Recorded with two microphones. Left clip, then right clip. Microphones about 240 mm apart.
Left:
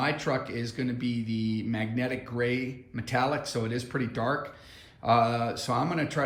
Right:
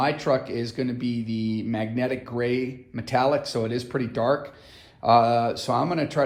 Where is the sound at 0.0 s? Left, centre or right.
Right.